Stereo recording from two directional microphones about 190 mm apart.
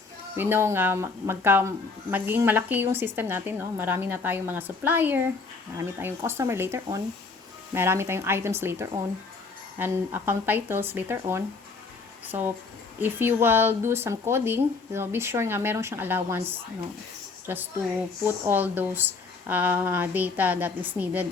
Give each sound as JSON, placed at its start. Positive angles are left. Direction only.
{"t": 0.3, "sound": "speech", "side_deg": -10}
{"t": 17.4, "sound": "speech", "side_deg": -10}